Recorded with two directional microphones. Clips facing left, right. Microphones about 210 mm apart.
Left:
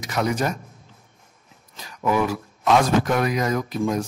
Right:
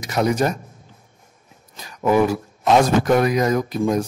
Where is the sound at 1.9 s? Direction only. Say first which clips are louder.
Right 5 dB; 35° right (ahead or behind).